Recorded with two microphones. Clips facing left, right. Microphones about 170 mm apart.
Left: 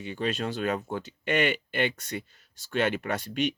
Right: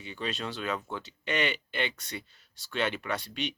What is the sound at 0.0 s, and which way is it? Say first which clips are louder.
Speech: left 5 dB; 50° left (ahead or behind).